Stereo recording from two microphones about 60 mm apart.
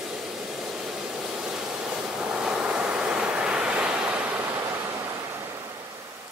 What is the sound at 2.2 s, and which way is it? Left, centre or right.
Waves, centre.